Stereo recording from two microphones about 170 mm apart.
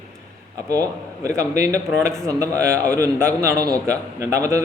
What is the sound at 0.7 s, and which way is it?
A man's voice, 20° right (ahead or behind).